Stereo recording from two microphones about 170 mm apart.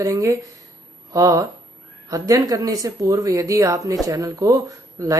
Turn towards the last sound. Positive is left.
turn(degrees=-20)  # may be behind; listen again after turning